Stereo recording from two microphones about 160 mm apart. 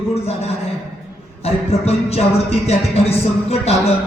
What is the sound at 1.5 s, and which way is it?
Music, 40° left (ahead or behind).